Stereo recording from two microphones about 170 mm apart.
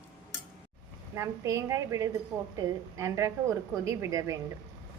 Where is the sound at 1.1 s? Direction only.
15° right (ahead or behind).